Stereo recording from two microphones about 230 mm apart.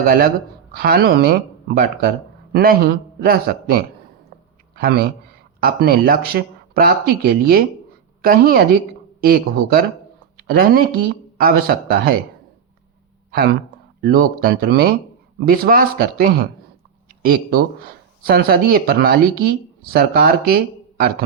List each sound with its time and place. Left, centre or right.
0.0 s a man's voice: right
14.0 s speech: right